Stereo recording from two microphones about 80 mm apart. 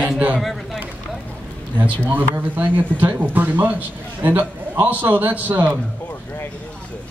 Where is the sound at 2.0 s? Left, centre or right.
Right.